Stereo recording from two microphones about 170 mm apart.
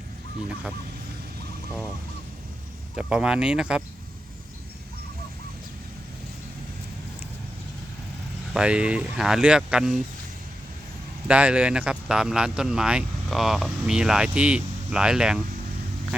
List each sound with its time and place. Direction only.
2.9 s speech: 5° right (ahead or behind)
8.5 s speech: 5° right (ahead or behind)
11.3 s speech: 5° right (ahead or behind)